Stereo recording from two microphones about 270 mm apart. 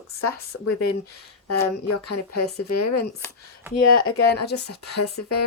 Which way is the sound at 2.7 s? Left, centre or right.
Left.